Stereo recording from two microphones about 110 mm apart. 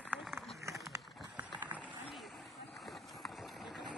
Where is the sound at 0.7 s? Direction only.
30° right (ahead or behind).